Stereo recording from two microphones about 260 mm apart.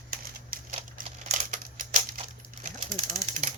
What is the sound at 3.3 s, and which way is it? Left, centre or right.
Speech, right.